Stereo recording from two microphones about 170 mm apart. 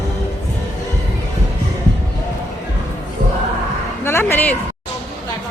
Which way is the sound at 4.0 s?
15° left (ahead or behind).